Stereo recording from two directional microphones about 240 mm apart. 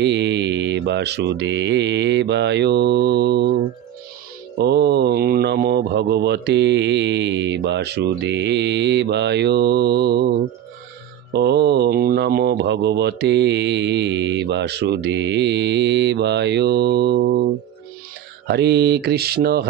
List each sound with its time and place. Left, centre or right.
0.0 s speech: right
4.6 s speech: right
11.3 s speech: right
18.5 s mantra: right